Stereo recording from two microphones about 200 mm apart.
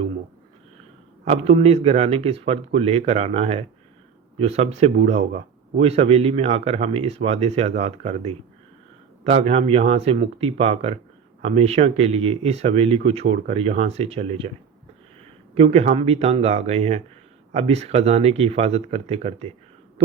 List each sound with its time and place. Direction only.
1.2 s a man's voice: 30° right (ahead or behind)